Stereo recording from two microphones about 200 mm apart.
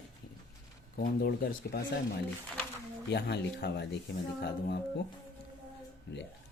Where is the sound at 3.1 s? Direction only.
55° left (ahead or behind).